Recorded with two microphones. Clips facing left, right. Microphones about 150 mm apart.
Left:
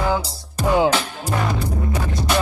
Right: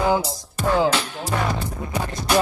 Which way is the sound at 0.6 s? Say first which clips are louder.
Left 2 dB; 15° left (ahead or behind).